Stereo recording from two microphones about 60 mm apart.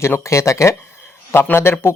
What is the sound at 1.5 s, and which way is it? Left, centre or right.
Speech, left.